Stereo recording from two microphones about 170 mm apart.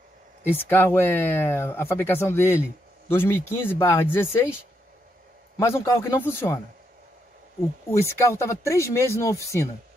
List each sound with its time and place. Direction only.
0.4 s speech: 10° left (ahead or behind)
5.6 s speech: 15° left (ahead or behind)
7.9 s speech: 15° left (ahead or behind)